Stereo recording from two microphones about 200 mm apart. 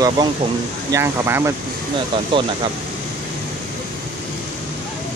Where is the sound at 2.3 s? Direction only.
25° right (ahead or behind).